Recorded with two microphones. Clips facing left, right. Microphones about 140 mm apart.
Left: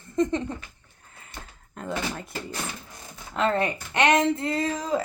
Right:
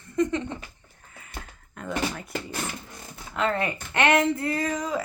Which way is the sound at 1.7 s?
30° left (ahead or behind).